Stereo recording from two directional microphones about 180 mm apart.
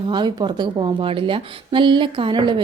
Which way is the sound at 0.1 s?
25° right (ahead or behind).